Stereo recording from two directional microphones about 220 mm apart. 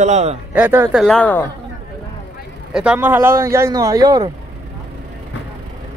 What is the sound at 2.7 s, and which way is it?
Speech, 5° right (ahead or behind).